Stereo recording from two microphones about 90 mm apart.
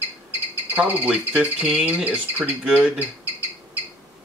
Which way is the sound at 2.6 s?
10° right (ahead or behind).